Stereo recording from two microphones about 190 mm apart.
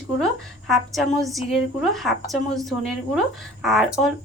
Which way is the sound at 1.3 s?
Centre (ahead or behind).